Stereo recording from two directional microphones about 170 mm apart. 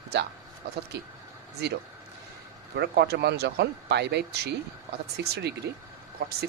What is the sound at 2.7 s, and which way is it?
Speech, 75° right (ahead or behind).